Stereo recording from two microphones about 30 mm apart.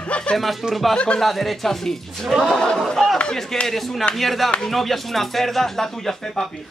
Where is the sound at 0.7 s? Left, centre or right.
Centre.